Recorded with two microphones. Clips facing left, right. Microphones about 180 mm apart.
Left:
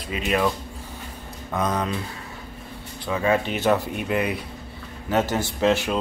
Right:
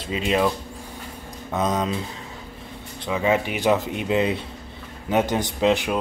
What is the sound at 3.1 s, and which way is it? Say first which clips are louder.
A man's voice: even; 15° right (ahead or behind).